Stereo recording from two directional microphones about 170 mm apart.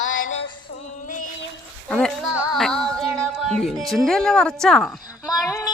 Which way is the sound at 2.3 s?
10° right (ahead or behind).